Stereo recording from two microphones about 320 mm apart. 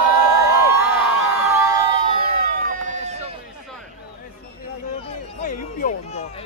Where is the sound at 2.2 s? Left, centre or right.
Right.